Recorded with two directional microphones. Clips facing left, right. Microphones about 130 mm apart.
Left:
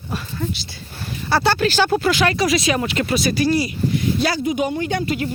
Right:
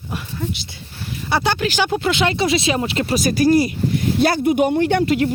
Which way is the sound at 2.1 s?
25° right (ahead or behind).